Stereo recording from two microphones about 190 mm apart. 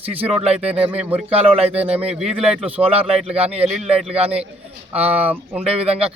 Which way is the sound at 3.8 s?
30° right (ahead or behind).